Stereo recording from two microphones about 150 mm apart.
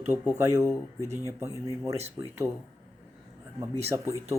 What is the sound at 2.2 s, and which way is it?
Speech, 25° right (ahead or behind).